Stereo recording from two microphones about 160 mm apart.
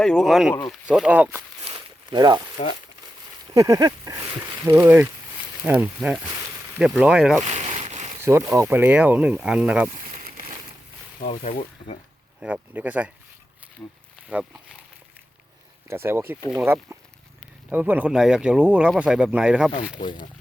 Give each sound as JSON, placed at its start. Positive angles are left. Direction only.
{"t": 0.0, "sound": "speech", "side_deg": 0}
{"t": 2.1, "sound": "speech", "side_deg": -25}
{"t": 3.5, "sound": "speech", "side_deg": -20}
{"t": 7.4, "sound": "a sound", "side_deg": -40}
{"t": 8.2, "sound": "speech", "side_deg": -15}
{"t": 11.3, "sound": "speech", "side_deg": 40}
{"t": 12.4, "sound": "speech", "side_deg": -10}
{"t": 13.8, "sound": "speech", "side_deg": 20}
{"t": 14.3, "sound": "speech", "side_deg": -5}
{"t": 15.9, "sound": "speech", "side_deg": -15}
{"t": 20.0, "sound": "speech", "side_deg": 30}